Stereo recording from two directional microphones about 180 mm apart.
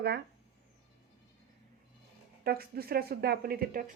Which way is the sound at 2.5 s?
60° right (ahead or behind).